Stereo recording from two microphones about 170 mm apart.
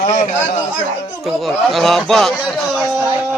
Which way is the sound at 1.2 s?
Centre (ahead or behind).